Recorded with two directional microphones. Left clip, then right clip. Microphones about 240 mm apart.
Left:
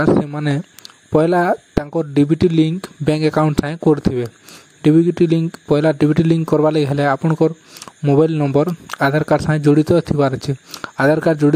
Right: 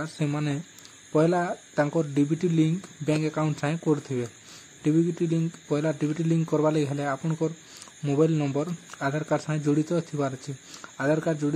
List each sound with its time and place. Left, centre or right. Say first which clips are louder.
0.1 s speech: left 13 dB; left